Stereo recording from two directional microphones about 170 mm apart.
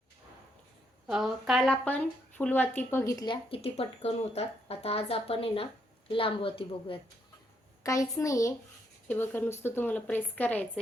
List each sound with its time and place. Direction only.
1.0 s speech: centre (ahead or behind); by 3.3 s 20° left (ahead or behind)
3.5 s speech: 35° left (ahead or behind)
7.9 s a child's voice: 20° left (ahead or behind)